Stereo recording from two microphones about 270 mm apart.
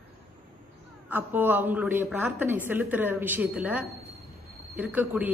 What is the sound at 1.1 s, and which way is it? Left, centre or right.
A man's voice, centre.